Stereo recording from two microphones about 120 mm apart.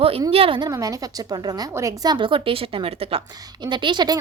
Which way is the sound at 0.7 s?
30° right (ahead or behind).